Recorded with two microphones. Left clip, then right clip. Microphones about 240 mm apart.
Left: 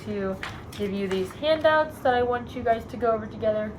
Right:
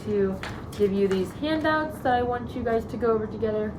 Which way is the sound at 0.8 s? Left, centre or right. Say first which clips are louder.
Right 5 dB; centre.